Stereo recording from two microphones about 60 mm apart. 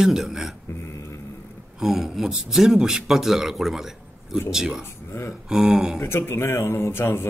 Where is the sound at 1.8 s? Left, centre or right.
Centre.